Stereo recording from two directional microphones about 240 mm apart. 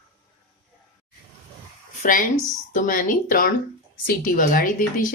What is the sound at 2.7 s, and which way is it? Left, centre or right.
A woman's voice, left.